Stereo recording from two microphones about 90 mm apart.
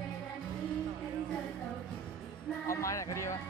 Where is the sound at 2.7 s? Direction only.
35° left (ahead or behind).